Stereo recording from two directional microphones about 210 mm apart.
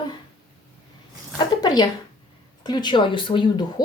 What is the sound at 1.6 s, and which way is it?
Speech, 20° left (ahead or behind).